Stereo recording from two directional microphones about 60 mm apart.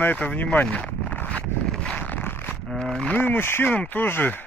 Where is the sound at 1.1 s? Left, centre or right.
Left.